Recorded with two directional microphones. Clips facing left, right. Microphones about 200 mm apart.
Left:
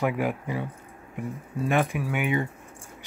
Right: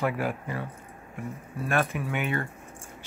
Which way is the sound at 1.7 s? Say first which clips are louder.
Left 2 dB; 15° left (ahead or behind).